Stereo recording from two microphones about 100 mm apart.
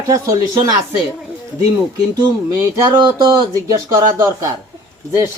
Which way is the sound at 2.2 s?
30° right (ahead or behind).